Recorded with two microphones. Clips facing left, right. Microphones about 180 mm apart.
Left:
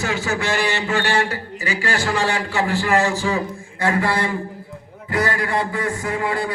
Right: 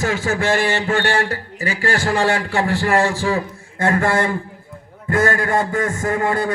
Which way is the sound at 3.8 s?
50° right (ahead or behind).